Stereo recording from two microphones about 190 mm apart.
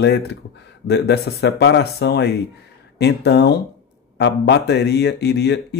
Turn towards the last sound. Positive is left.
turn(degrees=60)  # may be behind; listen again after turning